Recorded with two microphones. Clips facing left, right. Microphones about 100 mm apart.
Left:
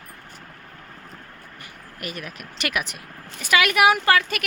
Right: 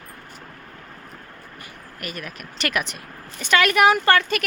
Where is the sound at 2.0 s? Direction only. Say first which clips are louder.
Even; 20° left (ahead or behind).